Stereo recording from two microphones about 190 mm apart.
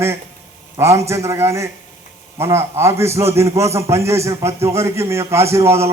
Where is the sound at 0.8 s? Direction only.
15° right (ahead or behind).